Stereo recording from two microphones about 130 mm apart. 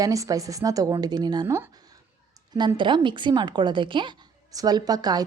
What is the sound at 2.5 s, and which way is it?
A woman's voice, 35° right (ahead or behind).